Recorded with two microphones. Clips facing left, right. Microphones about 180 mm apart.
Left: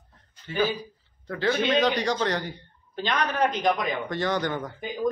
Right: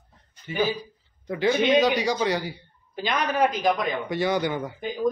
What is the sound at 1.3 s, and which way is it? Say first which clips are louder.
A man's voice: right 3 dB; 15° right (ahead or behind).